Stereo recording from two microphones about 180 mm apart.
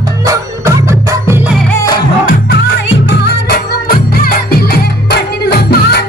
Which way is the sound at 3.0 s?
60° left (ahead or behind).